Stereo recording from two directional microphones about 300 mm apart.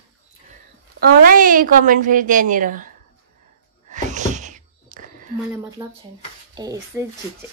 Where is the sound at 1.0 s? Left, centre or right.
Right.